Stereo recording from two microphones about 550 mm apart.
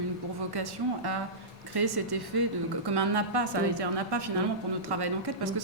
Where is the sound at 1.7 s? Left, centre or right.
Right.